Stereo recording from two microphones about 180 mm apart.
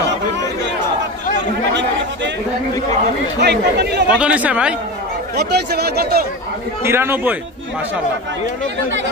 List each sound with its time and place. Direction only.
3.3 s speech: 70° right (ahead or behind)
4.1 s speech: 5° right (ahead or behind)
5.3 s speech: 65° right (ahead or behind)
6.8 s speech: 15° right (ahead or behind)